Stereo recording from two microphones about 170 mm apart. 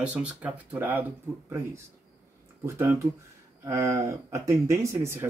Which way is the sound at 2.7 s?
15° right (ahead or behind).